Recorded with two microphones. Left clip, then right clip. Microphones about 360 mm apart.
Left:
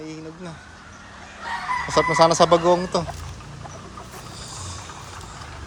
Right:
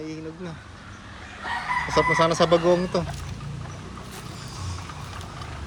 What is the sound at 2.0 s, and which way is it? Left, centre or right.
Speech, centre.